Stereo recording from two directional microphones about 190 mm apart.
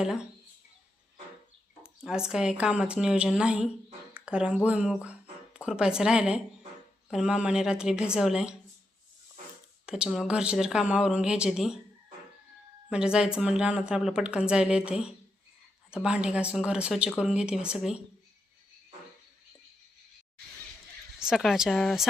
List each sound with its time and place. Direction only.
1.8 s speech: 5° right (ahead or behind)
9.8 s speech: 5° right (ahead or behind)
12.9 s speech: 5° right (ahead or behind)
21.2 s speech: 5° right (ahead or behind)